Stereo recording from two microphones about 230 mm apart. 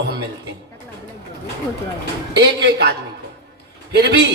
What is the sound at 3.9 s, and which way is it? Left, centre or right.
Speech, right.